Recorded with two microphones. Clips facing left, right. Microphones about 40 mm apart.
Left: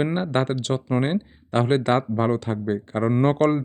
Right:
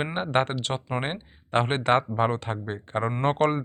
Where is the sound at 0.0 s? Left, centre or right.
Right.